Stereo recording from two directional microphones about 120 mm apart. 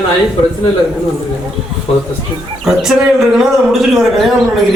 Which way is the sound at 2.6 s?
5° right (ahead or behind).